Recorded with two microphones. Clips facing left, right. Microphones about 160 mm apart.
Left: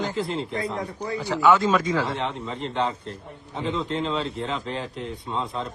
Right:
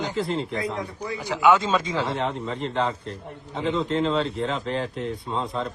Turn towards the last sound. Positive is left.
turn(degrees=0)  # may be behind; listen again after turning